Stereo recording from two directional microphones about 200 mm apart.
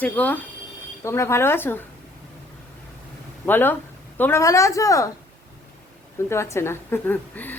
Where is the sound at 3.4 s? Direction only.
10° left (ahead or behind).